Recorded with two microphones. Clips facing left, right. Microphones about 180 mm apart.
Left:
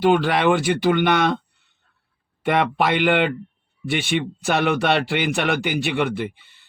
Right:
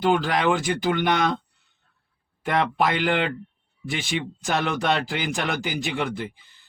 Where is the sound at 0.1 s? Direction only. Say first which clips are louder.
Left 1 dB; 65° left (ahead or behind).